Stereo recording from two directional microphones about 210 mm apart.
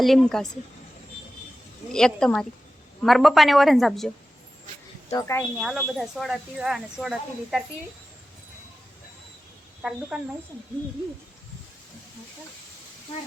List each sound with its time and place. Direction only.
0.0 s speech: centre (ahead or behind)
1.9 s speech: 5° left (ahead or behind)
5.1 s speech: 15° left (ahead or behind)
5.5 s speech: centre (ahead or behind)
9.8 s speech: centre (ahead or behind)